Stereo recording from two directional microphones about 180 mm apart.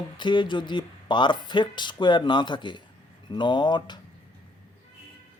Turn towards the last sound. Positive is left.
turn(degrees=25)  # may be behind; listen again after turning